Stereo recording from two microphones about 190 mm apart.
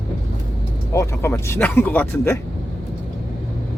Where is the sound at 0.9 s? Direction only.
15° left (ahead or behind).